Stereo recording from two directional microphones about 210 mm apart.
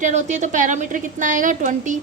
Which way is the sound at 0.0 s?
35° right (ahead or behind).